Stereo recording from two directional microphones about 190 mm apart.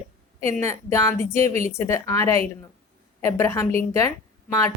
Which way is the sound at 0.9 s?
15° left (ahead or behind).